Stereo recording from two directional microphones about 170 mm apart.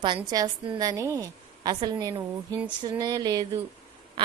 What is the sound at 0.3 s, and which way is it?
A woman's voice, 20° right (ahead or behind).